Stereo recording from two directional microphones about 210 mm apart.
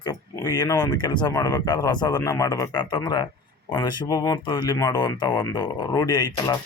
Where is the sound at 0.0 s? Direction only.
15° left (ahead or behind).